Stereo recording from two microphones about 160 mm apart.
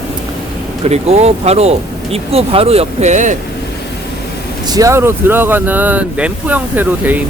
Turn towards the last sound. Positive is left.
turn(degrees=-10)  # may be behind; listen again after turning